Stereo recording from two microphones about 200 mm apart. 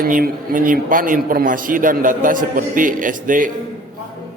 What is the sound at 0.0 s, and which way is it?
A man's voice, 45° right (ahead or behind).